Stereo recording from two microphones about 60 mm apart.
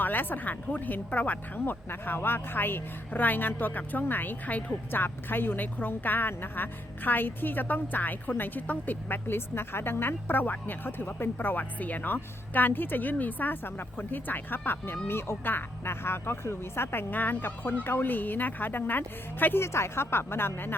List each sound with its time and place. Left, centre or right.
0.0 s speech: left
19.6 s speech: left